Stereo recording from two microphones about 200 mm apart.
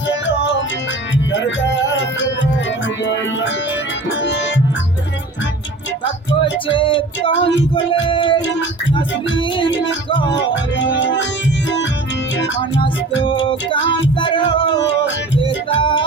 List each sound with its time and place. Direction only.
0.1 s music: 60° left (ahead or behind)
6.4 s music: 25° left (ahead or behind)
10.3 s music: 65° left (ahead or behind)
13.4 s music: 25° left (ahead or behind)
14.8 s music: 60° left (ahead or behind)
15.8 s music: 25° left (ahead or behind)